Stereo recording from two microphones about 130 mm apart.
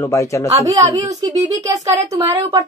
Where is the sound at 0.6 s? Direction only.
25° right (ahead or behind).